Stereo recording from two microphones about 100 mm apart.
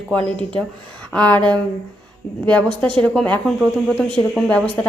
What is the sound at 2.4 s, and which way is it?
Speech, 15° left (ahead or behind).